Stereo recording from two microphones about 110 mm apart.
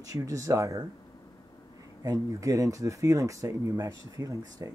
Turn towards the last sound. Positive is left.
turn(degrees=-35)  # may be behind; listen again after turning